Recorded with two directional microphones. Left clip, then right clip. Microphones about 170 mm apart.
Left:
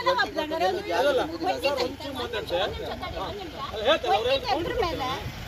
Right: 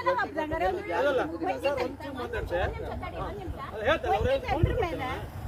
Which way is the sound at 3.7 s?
15° left (ahead or behind).